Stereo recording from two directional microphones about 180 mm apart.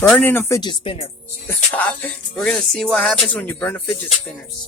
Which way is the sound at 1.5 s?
10° left (ahead or behind).